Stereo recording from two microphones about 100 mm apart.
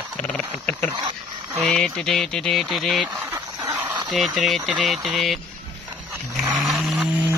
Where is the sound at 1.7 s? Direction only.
5° left (ahead or behind).